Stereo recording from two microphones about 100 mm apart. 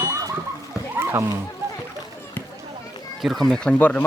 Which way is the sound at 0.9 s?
25° right (ahead or behind).